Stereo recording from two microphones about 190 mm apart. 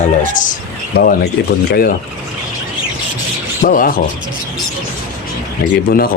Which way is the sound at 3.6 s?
45° left (ahead or behind).